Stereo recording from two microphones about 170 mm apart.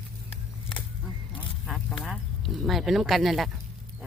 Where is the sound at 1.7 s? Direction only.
Centre (ahead or behind).